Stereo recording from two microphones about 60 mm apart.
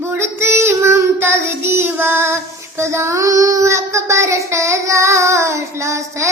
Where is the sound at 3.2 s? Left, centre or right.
Right.